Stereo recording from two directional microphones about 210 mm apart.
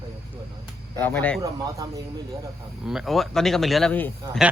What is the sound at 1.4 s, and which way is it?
Speech, 15° right (ahead or behind).